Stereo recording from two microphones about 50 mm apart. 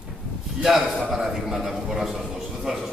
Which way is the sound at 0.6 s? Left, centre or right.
Centre.